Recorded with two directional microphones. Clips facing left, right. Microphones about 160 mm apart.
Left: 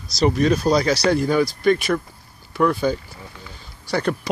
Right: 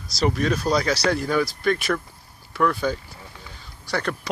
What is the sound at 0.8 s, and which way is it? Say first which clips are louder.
Speech: left 4 dB; centre (ahead or behind).